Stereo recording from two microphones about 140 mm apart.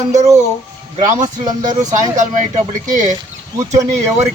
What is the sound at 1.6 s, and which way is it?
Speech, 60° right (ahead or behind).